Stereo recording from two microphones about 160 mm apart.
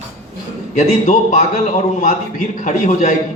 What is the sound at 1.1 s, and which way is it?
A man's voice, 50° left (ahead or behind).